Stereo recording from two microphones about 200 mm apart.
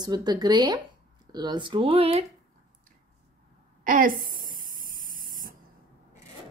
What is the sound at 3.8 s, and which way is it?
Spray, 45° right (ahead or behind).